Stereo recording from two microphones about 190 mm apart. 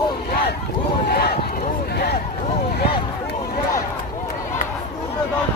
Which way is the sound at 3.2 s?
50° left (ahead or behind).